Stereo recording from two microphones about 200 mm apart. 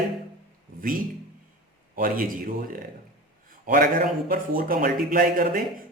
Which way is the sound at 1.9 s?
45° right (ahead or behind).